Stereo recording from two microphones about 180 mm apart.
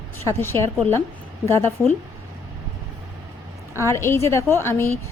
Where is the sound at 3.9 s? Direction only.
15° left (ahead or behind).